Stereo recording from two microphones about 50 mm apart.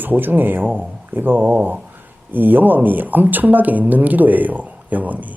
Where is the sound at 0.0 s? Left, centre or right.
Right.